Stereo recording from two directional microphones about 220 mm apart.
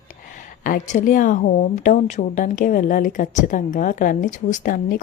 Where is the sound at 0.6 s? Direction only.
35° left (ahead or behind).